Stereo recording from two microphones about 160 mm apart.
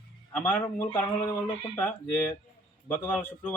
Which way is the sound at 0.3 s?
15° left (ahead or behind).